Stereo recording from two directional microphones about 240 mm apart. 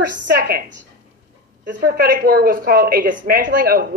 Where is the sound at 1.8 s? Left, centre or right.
Right.